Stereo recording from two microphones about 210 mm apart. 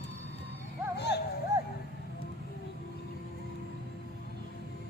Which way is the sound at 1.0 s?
55° left (ahead or behind).